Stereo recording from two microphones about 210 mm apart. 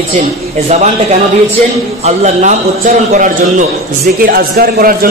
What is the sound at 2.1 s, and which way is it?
A man's voice, 35° right (ahead or behind).